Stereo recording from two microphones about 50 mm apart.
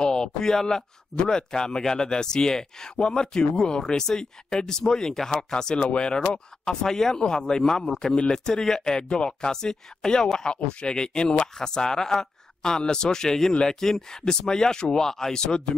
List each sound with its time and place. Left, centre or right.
0.0 s speech: centre